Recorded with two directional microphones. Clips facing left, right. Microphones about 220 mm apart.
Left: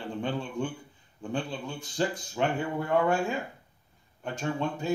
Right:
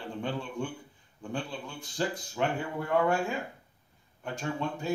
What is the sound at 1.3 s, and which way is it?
Speech, 20° left (ahead or behind).